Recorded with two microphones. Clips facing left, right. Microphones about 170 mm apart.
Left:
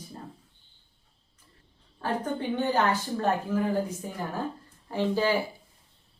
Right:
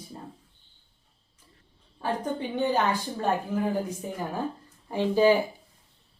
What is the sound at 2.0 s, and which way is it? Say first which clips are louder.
Speech: even; 10° right (ahead or behind).